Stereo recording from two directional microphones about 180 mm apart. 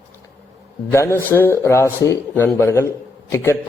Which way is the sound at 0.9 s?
15° left (ahead or behind).